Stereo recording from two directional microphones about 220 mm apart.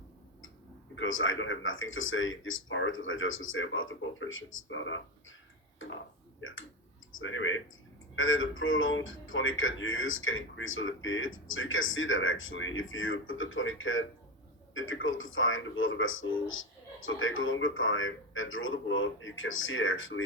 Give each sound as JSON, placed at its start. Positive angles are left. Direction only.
{"t": 0.9, "sound": "speech", "side_deg": 65}
{"t": 6.4, "sound": "speech", "side_deg": 65}